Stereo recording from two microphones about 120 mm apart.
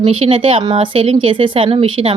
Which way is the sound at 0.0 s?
45° right (ahead or behind).